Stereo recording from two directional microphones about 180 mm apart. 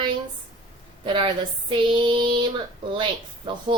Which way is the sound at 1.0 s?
30° right (ahead or behind).